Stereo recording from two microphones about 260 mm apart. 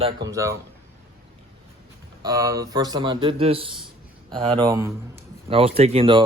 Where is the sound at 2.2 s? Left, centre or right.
Centre.